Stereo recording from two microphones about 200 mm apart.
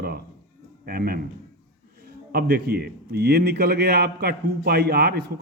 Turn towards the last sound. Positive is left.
turn(degrees=-50)  # may be behind; listen again after turning